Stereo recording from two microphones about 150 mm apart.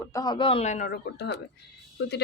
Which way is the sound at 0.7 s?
75° left (ahead or behind).